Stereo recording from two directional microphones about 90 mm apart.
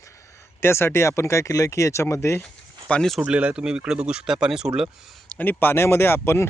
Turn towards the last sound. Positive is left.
turn(degrees=25)  # may be behind; listen again after turning